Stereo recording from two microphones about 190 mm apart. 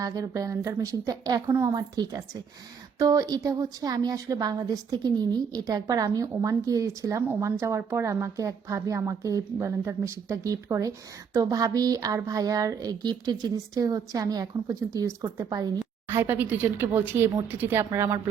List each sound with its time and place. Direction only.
0.0 s a woman's voice: 20° right (ahead or behind)